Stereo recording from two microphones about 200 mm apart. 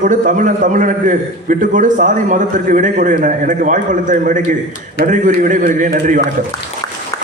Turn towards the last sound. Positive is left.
turn(degrees=-40)  # may be behind; listen again after turning